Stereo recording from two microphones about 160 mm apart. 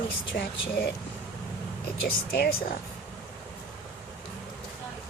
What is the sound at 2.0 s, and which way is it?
Speech, 80° left.